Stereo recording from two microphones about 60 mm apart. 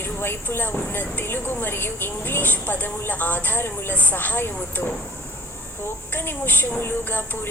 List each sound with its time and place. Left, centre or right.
0.0 s a woman's voice: left
6.1 s a woman's voice: left